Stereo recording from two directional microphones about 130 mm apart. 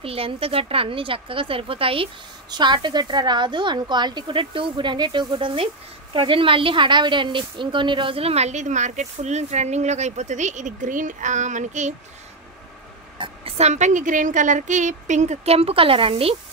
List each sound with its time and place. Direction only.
0.0 s a woman's voice: 45° right (ahead or behind); by 11.9 s 65° right (ahead or behind)
13.2 s a woman's voice: 45° right (ahead or behind)